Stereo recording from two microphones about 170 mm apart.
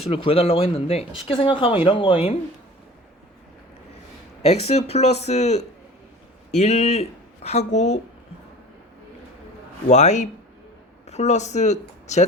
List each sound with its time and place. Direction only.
0.0 s speech: 35° left (ahead or behind)
4.4 s speech: 40° left (ahead or behind)
9.9 s speech: 45° left (ahead or behind)